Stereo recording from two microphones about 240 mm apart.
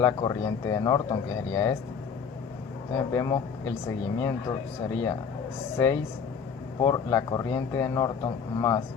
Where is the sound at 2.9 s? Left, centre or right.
Centre.